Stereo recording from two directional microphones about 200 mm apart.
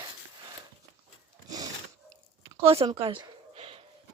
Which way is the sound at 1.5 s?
20° right (ahead or behind).